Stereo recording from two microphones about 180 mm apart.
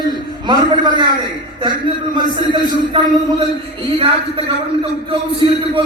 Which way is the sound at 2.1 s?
25° right (ahead or behind).